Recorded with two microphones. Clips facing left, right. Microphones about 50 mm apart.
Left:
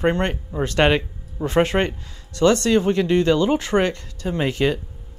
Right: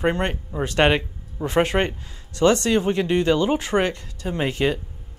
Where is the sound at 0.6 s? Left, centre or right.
Right.